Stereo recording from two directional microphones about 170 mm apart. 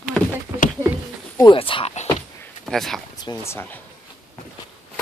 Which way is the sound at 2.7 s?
Centre (ahead or behind).